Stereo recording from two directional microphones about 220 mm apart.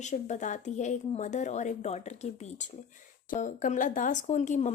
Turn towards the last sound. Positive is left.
turn(degrees=30)  # may be behind; listen again after turning